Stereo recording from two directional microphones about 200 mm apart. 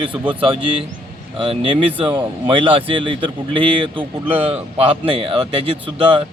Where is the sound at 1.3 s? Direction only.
25° right (ahead or behind).